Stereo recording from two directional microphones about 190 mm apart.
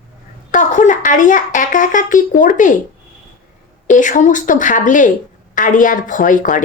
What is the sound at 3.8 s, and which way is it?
Speech, 40° left (ahead or behind).